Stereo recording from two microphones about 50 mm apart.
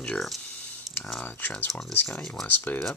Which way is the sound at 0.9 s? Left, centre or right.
Centre.